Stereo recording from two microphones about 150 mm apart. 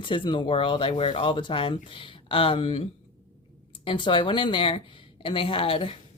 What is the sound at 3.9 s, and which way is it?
Speech, 35° left (ahead or behind).